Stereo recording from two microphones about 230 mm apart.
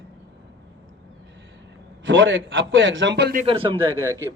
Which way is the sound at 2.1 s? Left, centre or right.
Right.